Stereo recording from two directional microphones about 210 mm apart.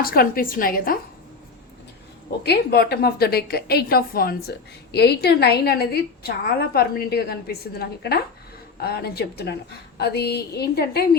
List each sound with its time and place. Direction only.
0.0 s a woman's voice: 45° left (ahead or behind)
2.4 s a woman's voice: 50° left (ahead or behind)